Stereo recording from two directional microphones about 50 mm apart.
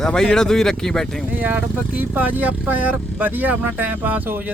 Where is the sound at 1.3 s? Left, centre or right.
Right.